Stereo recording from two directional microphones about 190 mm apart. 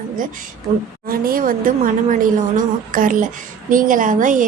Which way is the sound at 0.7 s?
35° right (ahead or behind).